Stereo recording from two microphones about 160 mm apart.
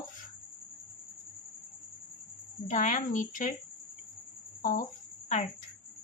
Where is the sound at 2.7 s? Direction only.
50° left (ahead or behind).